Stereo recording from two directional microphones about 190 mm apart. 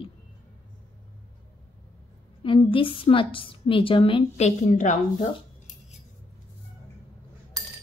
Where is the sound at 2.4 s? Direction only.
25° left (ahead or behind).